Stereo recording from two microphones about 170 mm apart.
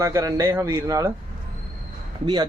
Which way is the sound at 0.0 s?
20° right (ahead or behind).